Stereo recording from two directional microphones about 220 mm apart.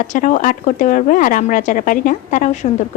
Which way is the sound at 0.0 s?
35° left (ahead or behind).